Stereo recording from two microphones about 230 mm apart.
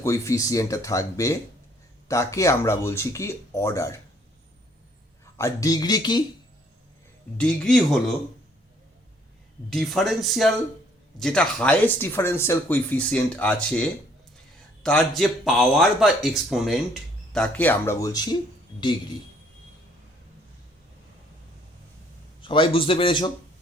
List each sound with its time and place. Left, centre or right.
0.0 s speech: centre
5.4 s speech: centre
7.3 s speech: centre
9.6 s speech: centre
14.8 s speech: centre
22.4 s a man's voice: left